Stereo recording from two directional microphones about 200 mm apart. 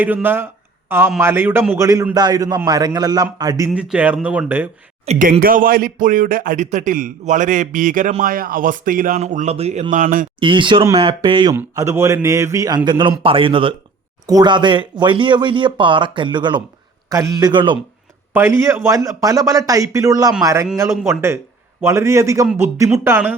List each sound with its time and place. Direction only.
0.0 s a man's voice: 10° right (ahead or behind)
3.7 s a man's voice: 5° right (ahead or behind)
5.0 s speech: 45° right (ahead or behind)
10.4 s a man's voice: 25° right (ahead or behind)